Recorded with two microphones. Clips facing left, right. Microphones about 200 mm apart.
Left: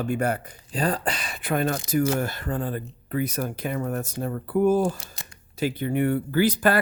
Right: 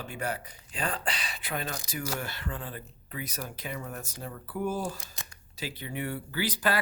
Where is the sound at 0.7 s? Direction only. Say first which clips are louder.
Left 8 dB; 40° left (ahead or behind).